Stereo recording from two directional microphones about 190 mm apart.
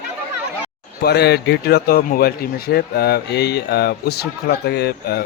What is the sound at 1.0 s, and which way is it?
Speech, 60° left (ahead or behind).